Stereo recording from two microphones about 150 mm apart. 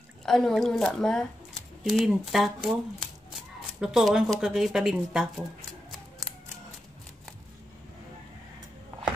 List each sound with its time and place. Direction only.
0.2 s speech: centre (ahead or behind)
3.8 s speech: 5° right (ahead or behind)